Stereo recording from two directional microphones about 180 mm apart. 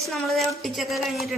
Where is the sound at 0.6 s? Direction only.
Centre (ahead or behind).